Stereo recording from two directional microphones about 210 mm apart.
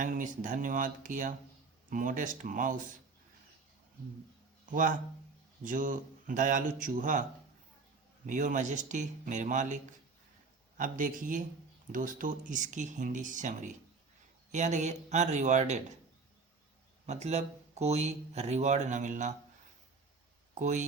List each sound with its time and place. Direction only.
0.0 s speech: 40° right (ahead or behind)
4.7 s speech: 40° right (ahead or behind)
8.3 s speech: 35° right (ahead or behind)
17.1 s speech: 30° right (ahead or behind)
20.6 s speech: 35° right (ahead or behind)